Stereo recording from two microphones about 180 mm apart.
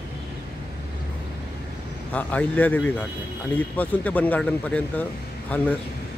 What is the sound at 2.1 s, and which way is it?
Speech, 10° left (ahead or behind).